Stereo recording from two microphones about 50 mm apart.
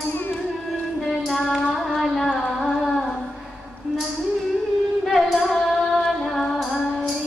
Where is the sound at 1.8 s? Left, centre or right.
Centre.